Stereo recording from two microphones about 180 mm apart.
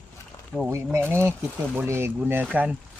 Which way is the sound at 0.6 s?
15° right (ahead or behind).